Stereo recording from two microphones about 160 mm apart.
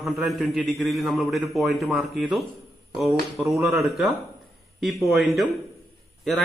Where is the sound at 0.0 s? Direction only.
Centre (ahead or behind).